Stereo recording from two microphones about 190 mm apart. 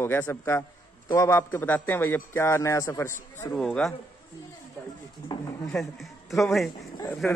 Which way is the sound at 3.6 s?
5° left (ahead or behind).